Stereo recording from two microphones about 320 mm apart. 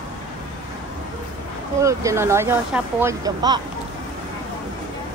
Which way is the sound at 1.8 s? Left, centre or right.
Centre.